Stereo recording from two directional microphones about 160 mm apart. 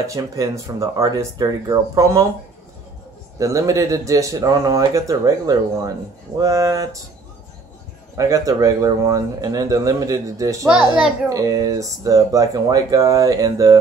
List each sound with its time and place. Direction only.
0.0 s speech: 20° right (ahead or behind)
3.3 s speech: 20° right (ahead or behind)
8.2 s speech: 20° right (ahead or behind)